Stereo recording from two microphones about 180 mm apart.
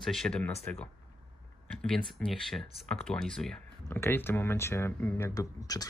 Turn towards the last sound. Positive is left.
turn(degrees=20)  # may be behind; listen again after turning